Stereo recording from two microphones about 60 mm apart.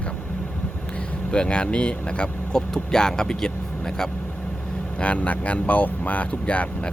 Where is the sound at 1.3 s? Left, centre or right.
Centre.